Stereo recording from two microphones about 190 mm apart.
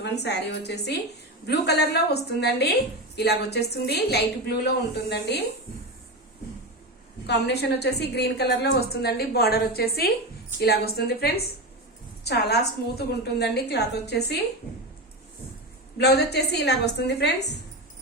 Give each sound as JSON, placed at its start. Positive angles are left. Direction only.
{"t": 0.0, "sound": "a woman's voice", "side_deg": 60}
{"t": 7.3, "sound": "a woman's voice", "side_deg": 60}
{"t": 16.0, "sound": "a woman's voice", "side_deg": 60}